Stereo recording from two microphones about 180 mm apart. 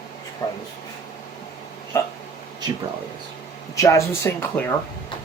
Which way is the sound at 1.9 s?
15° left (ahead or behind).